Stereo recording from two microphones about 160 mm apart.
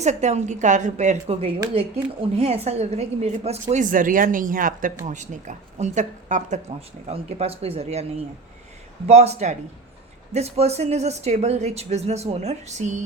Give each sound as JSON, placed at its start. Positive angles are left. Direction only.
{"t": 0.0, "sound": "speech", "side_deg": -45}
{"t": 9.0, "sound": "speech", "side_deg": -40}